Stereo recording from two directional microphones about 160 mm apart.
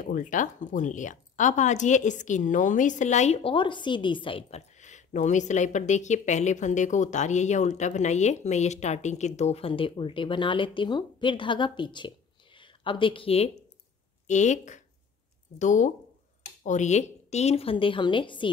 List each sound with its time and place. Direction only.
0.0 s a woman's voice: 55° left (ahead or behind)
3.5 s a woman's voice: 30° left (ahead or behind)
14.2 s a woman's voice: 50° left (ahead or behind); by 18.5 s 30° left (ahead or behind)